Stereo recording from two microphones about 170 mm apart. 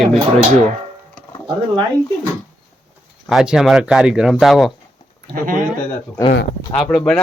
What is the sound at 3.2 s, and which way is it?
Speech, 5° right (ahead or behind).